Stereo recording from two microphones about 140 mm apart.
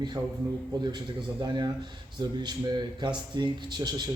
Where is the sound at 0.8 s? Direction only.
30° right (ahead or behind).